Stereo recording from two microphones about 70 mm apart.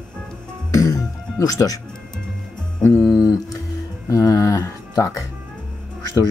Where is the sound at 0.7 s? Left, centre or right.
Left.